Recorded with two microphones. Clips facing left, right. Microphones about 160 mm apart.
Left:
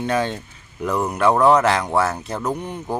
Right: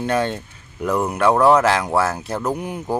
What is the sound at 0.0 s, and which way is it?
Speech, centre (ahead or behind).